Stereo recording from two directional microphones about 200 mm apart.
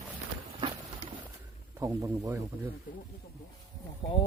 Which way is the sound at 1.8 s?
15° right (ahead or behind).